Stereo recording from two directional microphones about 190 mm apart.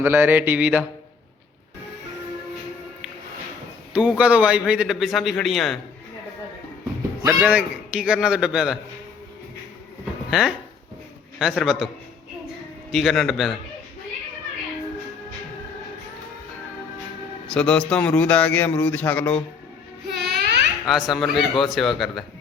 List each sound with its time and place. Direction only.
0.0 s mantra: 10° right (ahead or behind)
3.9 s a man's voice: 5° right (ahead or behind)
7.2 s a man's voice: 10° right (ahead or behind)
10.2 s a man's voice: centre (ahead or behind)
12.9 s a man's voice: centre (ahead or behind)
17.5 s a man's voice: 5° left (ahead or behind)
20.1 s babbling: 60° right (ahead or behind)
20.8 s a man's voice: centre (ahead or behind)